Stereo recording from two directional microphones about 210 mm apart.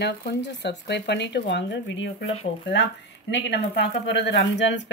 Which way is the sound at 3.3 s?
55° left (ahead or behind).